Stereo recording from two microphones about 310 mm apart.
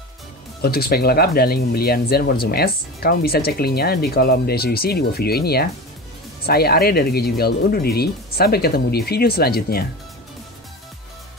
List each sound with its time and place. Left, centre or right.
0.6 s speech: left